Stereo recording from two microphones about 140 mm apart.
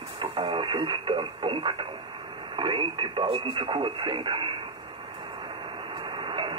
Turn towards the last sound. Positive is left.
turn(degrees=-35)  # may be behind; listen again after turning